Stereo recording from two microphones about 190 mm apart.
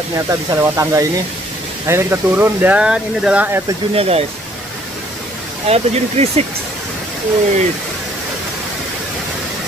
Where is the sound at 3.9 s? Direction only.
30° right (ahead or behind).